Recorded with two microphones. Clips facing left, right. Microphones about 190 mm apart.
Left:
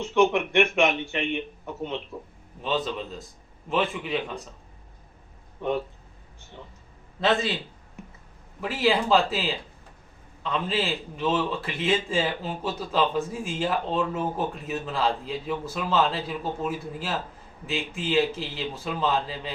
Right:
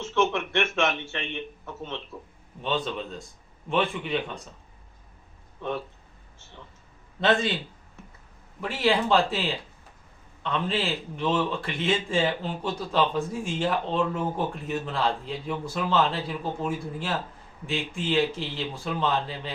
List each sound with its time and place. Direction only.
0.0 s a man's voice: 15° left (ahead or behind)
2.6 s speech: centre (ahead or behind)
5.5 s speech: 15° left (ahead or behind)
7.2 s speech: centre (ahead or behind)
8.6 s speech: 5° left (ahead or behind)